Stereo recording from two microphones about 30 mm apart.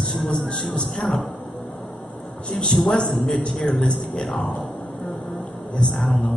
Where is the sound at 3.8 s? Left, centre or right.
Left.